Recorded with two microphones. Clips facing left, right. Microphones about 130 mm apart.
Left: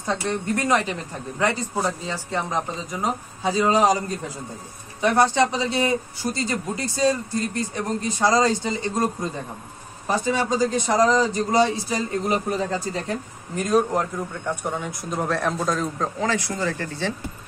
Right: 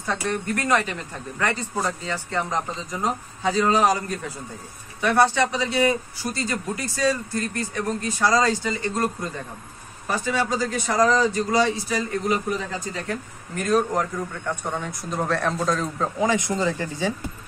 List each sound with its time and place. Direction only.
0.0 s a man's voice: 20° left (ahead or behind)
13.6 s a man's voice: 15° left (ahead or behind)
16.2 s speech: 15° right (ahead or behind)